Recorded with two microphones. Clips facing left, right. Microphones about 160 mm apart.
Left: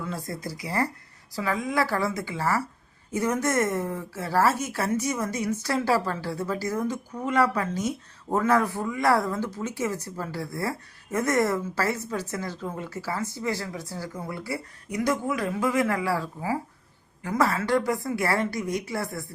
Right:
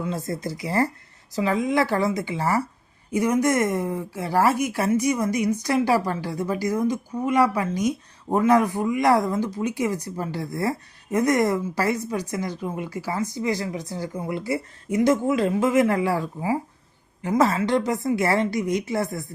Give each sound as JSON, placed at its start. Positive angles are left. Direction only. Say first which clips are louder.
{"t": 0.0, "sound": "a woman's voice", "louder": "right 5 dB", "side_deg": -20}